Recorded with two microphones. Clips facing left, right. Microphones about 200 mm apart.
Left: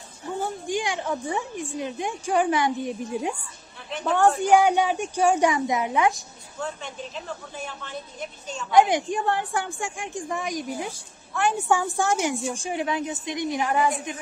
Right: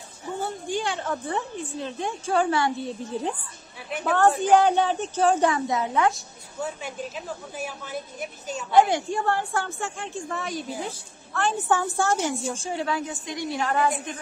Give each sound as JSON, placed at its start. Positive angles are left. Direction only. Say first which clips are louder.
{"t": 0.4, "sound": "a woman's voice", "louder": "left 1 dB", "side_deg": 15}
{"t": 4.4, "sound": "a woman's voice", "louder": "even", "side_deg": 10}
{"t": 6.6, "sound": "a woman's voice", "louder": "right 2 dB", "side_deg": -5}
{"t": 8.7, "sound": "a woman's voice", "louder": "left 1 dB", "side_deg": 15}